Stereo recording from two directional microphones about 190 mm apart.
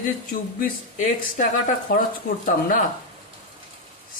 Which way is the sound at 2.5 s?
45° left (ahead or behind).